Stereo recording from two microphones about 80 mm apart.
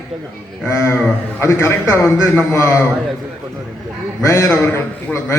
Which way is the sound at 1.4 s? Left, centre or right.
Left.